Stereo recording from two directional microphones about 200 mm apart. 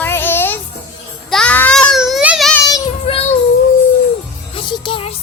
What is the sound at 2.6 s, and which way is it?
Child singing, 25° left (ahead or behind).